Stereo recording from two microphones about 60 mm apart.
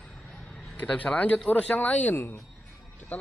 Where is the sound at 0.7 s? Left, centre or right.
Left.